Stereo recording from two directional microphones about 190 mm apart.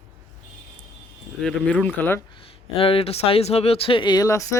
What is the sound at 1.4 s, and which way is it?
Speech, 5° left (ahead or behind).